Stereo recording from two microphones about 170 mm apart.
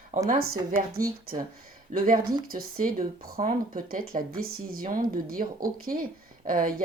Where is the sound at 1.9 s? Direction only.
55° right (ahead or behind).